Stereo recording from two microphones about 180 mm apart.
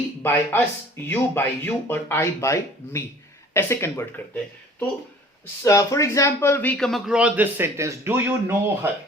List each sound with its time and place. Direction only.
0.2 s speech: 10° left (ahead or behind)
5.6 s a man's voice: 15° left (ahead or behind); by 8.9 s 15° right (ahead or behind)